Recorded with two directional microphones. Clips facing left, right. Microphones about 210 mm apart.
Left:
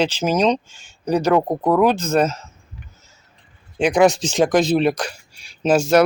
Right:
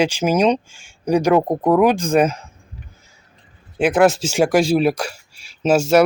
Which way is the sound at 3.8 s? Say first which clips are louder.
Even; 5° right (ahead or behind).